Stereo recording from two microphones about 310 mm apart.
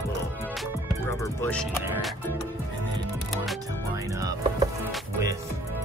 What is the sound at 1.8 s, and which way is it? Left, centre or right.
Music, centre.